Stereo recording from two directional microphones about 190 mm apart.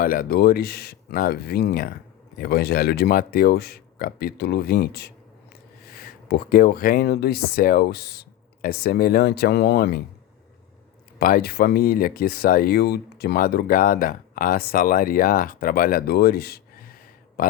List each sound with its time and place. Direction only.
0.0 s speech: 50° left (ahead or behind)
11.2 s speech: 50° left (ahead or behind)